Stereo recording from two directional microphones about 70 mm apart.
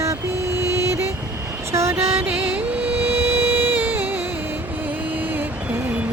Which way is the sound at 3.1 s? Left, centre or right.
Right.